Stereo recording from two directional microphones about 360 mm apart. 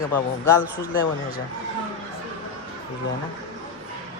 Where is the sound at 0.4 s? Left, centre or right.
Centre.